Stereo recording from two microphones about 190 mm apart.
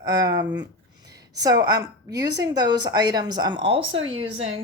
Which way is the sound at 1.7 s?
20° right (ahead or behind).